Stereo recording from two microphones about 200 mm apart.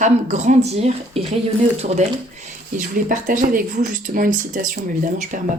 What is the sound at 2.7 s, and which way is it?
Speech, 40° right (ahead or behind).